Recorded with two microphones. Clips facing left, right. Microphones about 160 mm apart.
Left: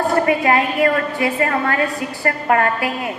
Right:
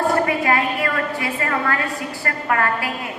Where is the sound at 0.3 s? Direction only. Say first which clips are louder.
Left 3 dB; 25° left (ahead or behind).